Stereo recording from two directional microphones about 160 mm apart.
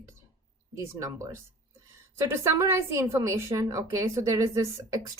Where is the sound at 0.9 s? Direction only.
20° right (ahead or behind).